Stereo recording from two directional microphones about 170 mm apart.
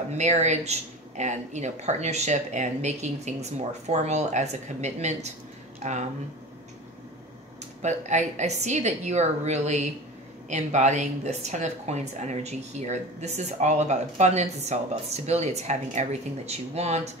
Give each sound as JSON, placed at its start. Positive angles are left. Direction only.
{"t": 0.2, "sound": "speech", "side_deg": -40}
{"t": 7.8, "sound": "speech", "side_deg": -45}